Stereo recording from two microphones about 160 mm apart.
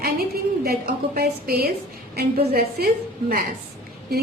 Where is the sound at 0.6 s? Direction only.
75° right (ahead or behind).